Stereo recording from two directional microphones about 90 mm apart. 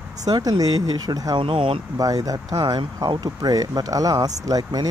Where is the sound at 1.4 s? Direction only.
75° right (ahead or behind).